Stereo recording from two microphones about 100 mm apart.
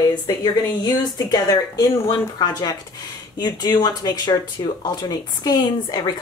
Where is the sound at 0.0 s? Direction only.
40° left (ahead or behind).